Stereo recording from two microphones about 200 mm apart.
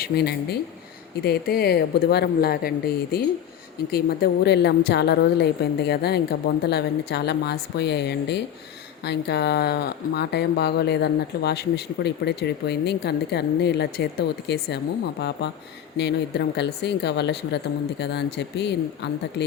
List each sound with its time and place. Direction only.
0.0 s speech: 50° left (ahead or behind)